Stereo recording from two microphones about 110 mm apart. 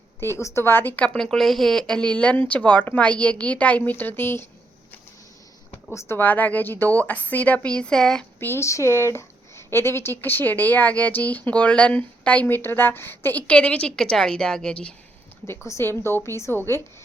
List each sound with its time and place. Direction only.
0.2 s speech: 25° left (ahead or behind)
5.9 s speech: 25° left (ahead or behind); by 8.2 s 5° left (ahead or behind)
8.4 s speech: 20° left (ahead or behind)
15.4 s a woman's voice: 25° left (ahead or behind)